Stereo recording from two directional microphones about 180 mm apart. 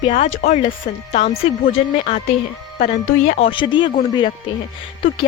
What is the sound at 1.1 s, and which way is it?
A woman's voice, 35° left (ahead or behind).